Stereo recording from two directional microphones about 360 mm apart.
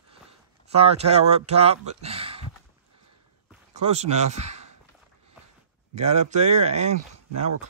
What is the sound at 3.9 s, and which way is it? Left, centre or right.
Speech, centre.